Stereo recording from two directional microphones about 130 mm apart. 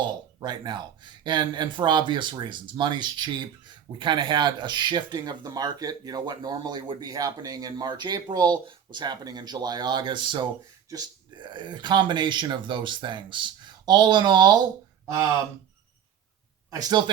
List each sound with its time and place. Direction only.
0.0 s speech: 35° right (ahead or behind)